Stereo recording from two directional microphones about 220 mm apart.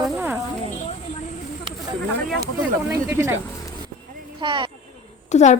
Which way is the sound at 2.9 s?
10° right (ahead or behind).